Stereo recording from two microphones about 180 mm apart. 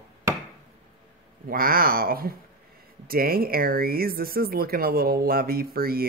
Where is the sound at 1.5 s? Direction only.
55° right (ahead or behind).